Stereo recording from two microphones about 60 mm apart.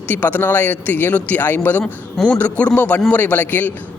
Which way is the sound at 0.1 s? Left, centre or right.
Left.